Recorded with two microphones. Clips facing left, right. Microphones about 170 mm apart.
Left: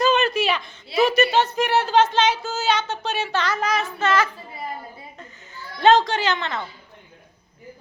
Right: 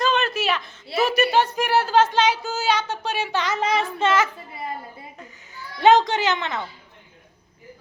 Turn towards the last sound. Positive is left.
turn(degrees=-15)  # may be behind; listen again after turning